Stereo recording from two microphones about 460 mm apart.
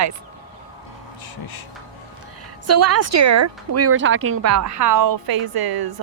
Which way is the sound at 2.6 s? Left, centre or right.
Right.